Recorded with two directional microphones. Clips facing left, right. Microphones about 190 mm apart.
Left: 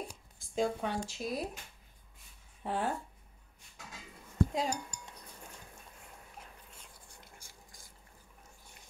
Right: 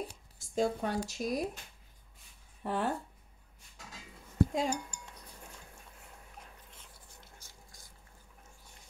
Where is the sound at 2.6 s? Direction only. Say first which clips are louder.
Right 1 dB; 60° right (ahead or behind).